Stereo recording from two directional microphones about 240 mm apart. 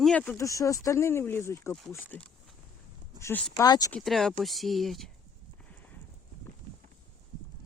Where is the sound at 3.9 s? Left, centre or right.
Centre.